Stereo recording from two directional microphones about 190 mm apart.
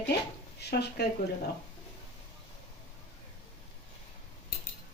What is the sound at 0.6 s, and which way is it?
Speech, 60° left (ahead or behind).